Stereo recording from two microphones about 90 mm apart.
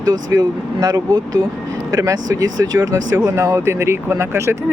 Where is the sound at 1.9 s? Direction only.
40° right (ahead or behind).